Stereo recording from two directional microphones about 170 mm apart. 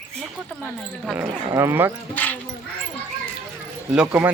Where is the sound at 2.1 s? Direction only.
10° left (ahead or behind).